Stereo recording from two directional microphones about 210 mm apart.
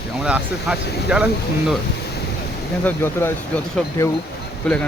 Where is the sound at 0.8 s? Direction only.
50° left (ahead or behind).